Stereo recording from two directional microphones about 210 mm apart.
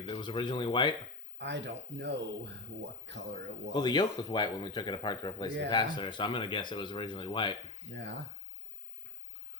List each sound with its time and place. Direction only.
0.1 s speech: 20° left (ahead or behind)
1.4 s speech: 55° right (ahead or behind)
3.7 s speech: 20° left (ahead or behind)
7.9 s speech: 55° right (ahead or behind)